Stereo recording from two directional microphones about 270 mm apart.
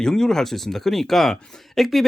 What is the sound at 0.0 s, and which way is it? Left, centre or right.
Speech, centre.